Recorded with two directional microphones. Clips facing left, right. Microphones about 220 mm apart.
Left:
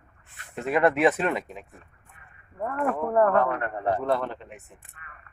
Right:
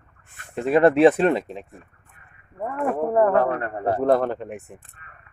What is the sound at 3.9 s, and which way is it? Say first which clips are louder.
Speech: right 7 dB; 45° right (ahead or behind).